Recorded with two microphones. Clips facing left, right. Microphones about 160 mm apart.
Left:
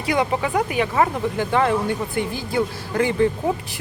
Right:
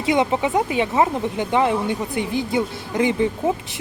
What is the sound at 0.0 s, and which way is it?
Speech, 20° right (ahead or behind).